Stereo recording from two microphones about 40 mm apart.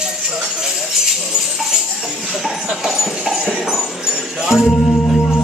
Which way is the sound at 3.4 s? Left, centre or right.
Right.